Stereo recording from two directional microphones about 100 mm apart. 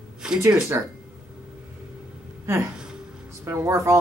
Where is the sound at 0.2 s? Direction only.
5° right (ahead or behind).